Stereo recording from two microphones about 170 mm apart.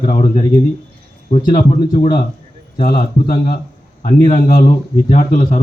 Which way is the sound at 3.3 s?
60° left (ahead or behind).